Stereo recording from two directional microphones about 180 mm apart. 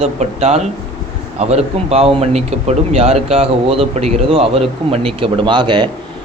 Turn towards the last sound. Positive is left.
turn(degrees=-25)  # may be behind; listen again after turning